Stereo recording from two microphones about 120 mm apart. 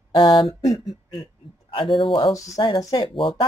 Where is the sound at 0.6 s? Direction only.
35° left (ahead or behind).